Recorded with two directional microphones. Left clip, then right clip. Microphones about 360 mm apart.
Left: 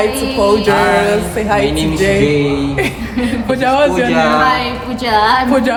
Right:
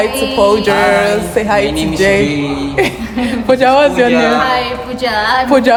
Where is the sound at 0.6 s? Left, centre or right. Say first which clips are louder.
Right 1 dB; right.